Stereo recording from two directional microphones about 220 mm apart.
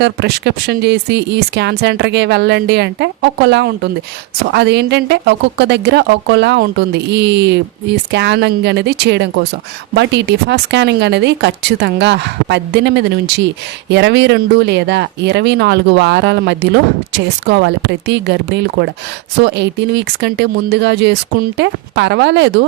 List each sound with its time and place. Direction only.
0.0 s speech: 50° right (ahead or behind)